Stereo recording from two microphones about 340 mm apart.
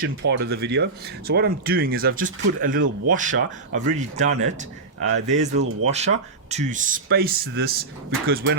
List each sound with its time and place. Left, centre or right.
0.0 s speech: right